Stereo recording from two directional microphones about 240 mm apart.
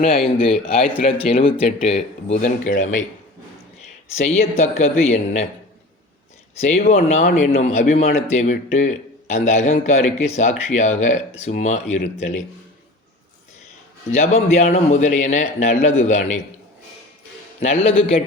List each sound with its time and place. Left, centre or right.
0.3 s speech: left
4.2 s speech: left
6.6 s a man's voice: left
14.1 s speech: left
17.6 s speech: left